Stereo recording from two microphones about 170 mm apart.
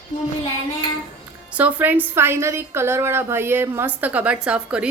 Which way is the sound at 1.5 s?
10° right (ahead or behind).